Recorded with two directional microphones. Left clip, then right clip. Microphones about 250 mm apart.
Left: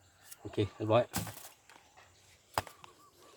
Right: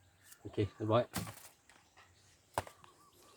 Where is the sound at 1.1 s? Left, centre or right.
Centre.